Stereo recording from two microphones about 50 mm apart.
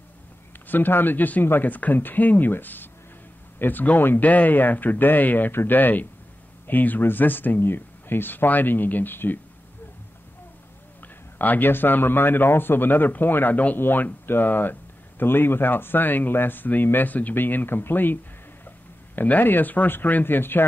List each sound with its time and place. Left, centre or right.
0.7 s speech: left
11.3 s a man's voice: left